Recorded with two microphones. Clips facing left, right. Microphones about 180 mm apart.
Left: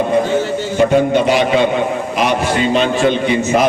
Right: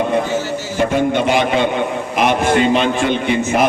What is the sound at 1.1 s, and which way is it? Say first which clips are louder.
A man's voice: left 3 dB; 55° right (ahead or behind).